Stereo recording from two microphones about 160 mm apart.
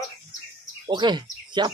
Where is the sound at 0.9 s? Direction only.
30° right (ahead or behind).